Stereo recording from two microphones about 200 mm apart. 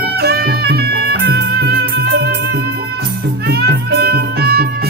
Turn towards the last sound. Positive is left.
turn(degrees=-50)  # may be behind; listen again after turning